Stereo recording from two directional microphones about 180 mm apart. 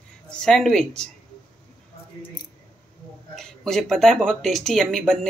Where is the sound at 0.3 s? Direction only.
5° left (ahead or behind).